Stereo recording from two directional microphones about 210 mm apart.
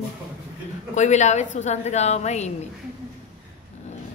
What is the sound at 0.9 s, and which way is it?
A woman's voice, 35° left (ahead or behind).